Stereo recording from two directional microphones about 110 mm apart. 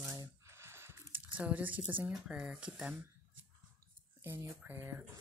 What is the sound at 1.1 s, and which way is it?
Speech, 10° right (ahead or behind).